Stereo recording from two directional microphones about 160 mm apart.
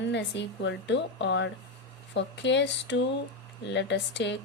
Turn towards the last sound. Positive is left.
turn(degrees=90)